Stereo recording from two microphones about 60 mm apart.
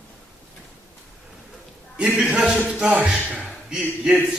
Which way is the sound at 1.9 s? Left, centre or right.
Centre.